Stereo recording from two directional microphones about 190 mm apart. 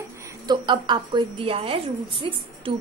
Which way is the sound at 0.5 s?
25° right (ahead or behind).